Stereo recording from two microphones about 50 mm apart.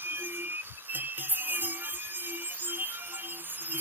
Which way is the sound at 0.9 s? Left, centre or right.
Right.